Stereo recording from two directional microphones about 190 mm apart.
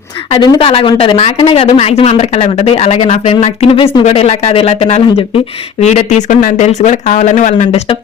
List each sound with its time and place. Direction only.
0.3 s a woman's voice: 20° left (ahead or behind)